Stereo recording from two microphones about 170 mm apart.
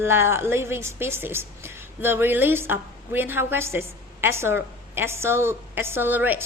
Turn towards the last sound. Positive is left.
turn(degrees=-10)  # may be behind; listen again after turning